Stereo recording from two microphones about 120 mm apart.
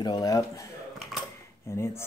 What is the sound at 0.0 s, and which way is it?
Speech, 35° left (ahead or behind).